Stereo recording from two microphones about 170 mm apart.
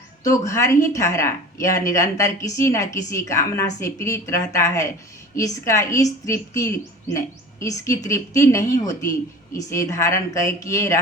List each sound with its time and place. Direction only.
0.3 s a woman's voice: 15° left (ahead or behind)